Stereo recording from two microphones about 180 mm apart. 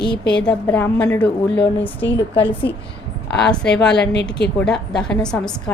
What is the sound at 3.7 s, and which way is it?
A woman's voice, 5° left (ahead or behind).